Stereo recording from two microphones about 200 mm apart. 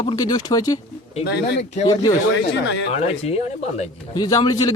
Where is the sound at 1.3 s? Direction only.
55° left (ahead or behind).